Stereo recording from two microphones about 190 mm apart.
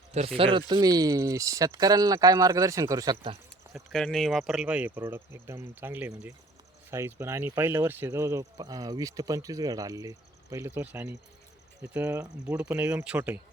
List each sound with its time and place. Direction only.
0.3 s speech: 25° right (ahead or behind)
3.8 s speech: centre (ahead or behind)